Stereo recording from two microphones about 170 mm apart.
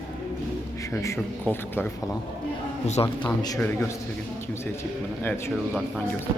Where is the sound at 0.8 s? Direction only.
20° left (ahead or behind).